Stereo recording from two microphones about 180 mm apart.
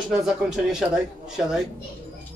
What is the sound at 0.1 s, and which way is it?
Speech, 5° right (ahead or behind).